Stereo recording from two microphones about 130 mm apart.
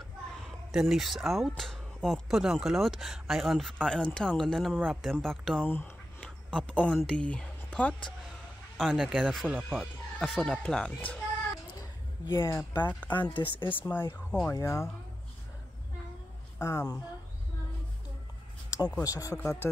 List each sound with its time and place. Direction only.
0.4 s speech: centre (ahead or behind)
5.7 s a sound: 10° left (ahead or behind)
7.0 s speech: 5° left (ahead or behind)
8.7 s speech: centre (ahead or behind)
11.8 s a sound: 20° left (ahead or behind)
12.8 s speech: 15° left (ahead or behind)
13.2 s speech: 40° left (ahead or behind)
13.7 s speech: 15° left (ahead or behind)
16.5 s speech: 20° left (ahead or behind)
19.0 s speech: 25° left (ahead or behind)
19.3 s speech: 5° left (ahead or behind)